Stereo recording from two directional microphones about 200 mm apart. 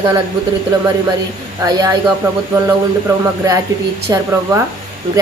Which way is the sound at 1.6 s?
20° right (ahead or behind).